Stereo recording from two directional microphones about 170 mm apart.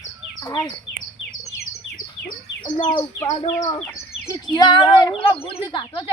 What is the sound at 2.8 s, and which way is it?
Speech, 25° left (ahead or behind).